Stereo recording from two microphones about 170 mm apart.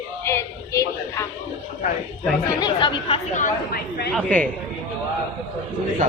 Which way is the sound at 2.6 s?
25° left (ahead or behind).